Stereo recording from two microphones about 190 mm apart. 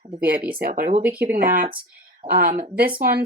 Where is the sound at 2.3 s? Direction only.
50° right (ahead or behind).